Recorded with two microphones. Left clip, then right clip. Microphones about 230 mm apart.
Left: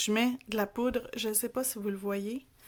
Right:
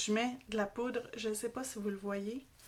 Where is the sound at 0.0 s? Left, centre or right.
Left.